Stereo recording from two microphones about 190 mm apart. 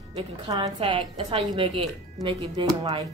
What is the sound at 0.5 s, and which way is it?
Speech, 20° right (ahead or behind).